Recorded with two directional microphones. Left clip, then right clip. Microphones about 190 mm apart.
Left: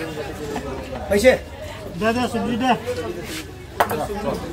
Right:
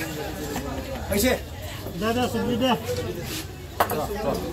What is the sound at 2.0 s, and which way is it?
Speech, 35° left (ahead or behind).